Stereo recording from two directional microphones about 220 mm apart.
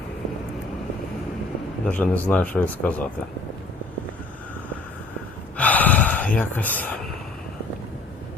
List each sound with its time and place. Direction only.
1.9 s speech: 5° left (ahead or behind)
5.5 s gasp: 5° left (ahead or behind)